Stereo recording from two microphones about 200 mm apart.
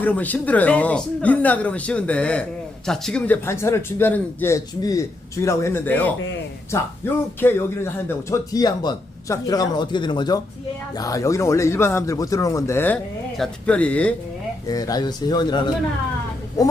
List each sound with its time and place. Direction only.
0.0 s speech: 10° left (ahead or behind)
14.7 s speech: 20° left (ahead or behind)